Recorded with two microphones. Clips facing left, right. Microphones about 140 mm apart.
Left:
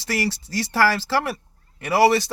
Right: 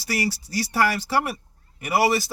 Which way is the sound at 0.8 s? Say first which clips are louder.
Left 2 dB; 90° left.